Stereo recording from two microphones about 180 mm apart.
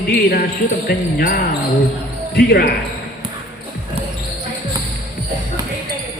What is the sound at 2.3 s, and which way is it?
Speech, 60° left (ahead or behind).